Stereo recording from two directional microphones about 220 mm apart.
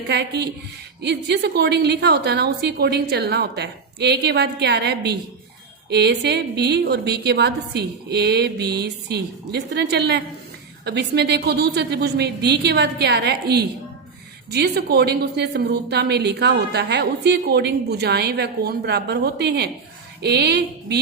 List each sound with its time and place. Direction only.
0.1 s a woman's voice: 50° right (ahead or behind)